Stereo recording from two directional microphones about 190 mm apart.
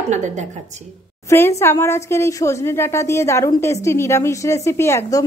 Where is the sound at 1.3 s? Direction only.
15° left (ahead or behind).